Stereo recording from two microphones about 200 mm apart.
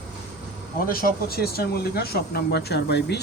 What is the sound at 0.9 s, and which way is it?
Speech, 45° left (ahead or behind).